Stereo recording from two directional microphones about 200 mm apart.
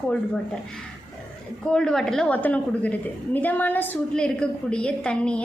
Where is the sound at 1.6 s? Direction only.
5° left (ahead or behind).